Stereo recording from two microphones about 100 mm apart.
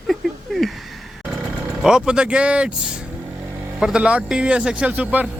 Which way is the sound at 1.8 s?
10° right (ahead or behind).